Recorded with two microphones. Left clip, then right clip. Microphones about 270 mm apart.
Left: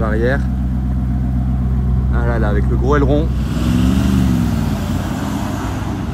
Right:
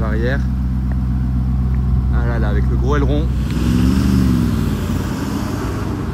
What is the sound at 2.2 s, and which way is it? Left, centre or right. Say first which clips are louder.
Speech: left 4 dB; left.